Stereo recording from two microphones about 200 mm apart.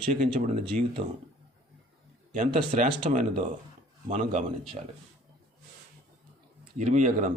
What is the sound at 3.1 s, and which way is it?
Speech, 40° right (ahead or behind).